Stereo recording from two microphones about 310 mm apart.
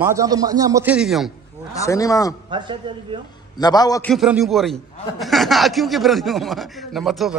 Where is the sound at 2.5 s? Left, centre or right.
Centre.